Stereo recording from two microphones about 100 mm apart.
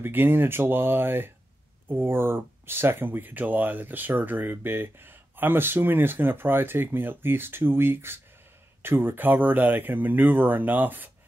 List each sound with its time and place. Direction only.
0.0 s speech: 20° right (ahead or behind)